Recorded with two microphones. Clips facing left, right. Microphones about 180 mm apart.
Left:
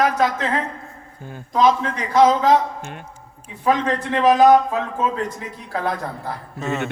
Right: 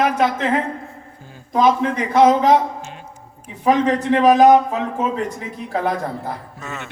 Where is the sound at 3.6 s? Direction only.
15° right (ahead or behind).